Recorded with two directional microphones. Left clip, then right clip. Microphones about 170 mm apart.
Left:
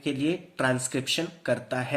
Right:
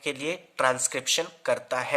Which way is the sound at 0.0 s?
40° right (ahead or behind).